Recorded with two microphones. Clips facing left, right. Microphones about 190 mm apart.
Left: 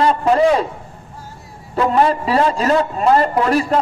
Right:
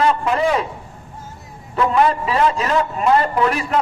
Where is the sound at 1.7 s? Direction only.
35° left (ahead or behind).